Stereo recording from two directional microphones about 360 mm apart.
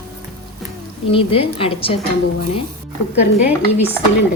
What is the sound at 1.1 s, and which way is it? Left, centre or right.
Speech, centre.